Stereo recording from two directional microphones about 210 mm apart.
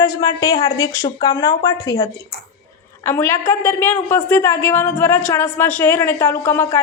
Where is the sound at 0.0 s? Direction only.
15° left (ahead or behind).